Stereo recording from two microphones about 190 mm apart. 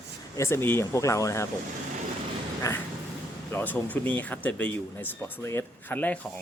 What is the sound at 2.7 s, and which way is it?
Speech, 15° left (ahead or behind).